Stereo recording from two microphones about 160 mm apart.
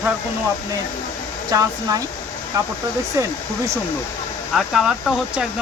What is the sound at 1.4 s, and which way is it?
Speech, 20° right (ahead or behind).